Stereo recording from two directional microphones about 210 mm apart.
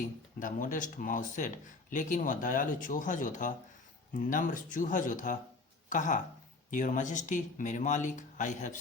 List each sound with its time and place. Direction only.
0.0 s speech: 40° left (ahead or behind)